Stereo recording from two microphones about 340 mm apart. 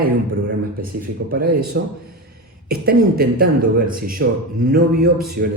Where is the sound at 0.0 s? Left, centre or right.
Right.